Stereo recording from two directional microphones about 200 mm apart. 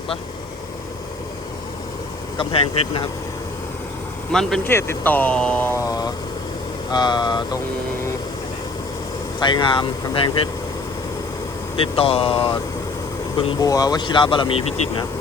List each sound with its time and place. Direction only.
2.4 s speech: 25° left (ahead or behind)
4.3 s speech: centre (ahead or behind); by 7.6 s 20° left (ahead or behind)
9.4 s speech: 25° left (ahead or behind)
11.8 s speech: 30° left (ahead or behind)